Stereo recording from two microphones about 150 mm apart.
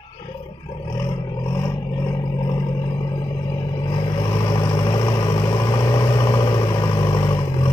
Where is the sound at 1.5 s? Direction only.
20° left (ahead or behind).